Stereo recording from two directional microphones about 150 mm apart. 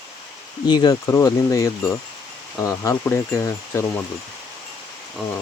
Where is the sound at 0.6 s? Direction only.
30° left (ahead or behind).